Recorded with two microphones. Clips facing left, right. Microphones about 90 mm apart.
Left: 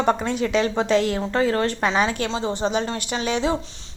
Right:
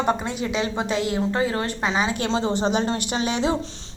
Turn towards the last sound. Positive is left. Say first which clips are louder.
# even
turn(degrees=-20)  # may be behind; listen again after turning